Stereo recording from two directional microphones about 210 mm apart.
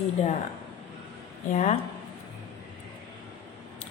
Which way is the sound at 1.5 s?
35° left (ahead or behind).